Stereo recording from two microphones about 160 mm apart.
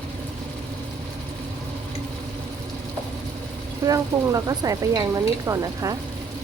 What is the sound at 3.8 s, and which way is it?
Speech, 20° right (ahead or behind).